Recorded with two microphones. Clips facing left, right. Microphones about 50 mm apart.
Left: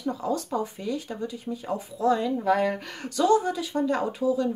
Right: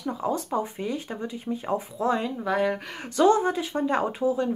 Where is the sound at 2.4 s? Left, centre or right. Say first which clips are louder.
Left 1 dB; centre.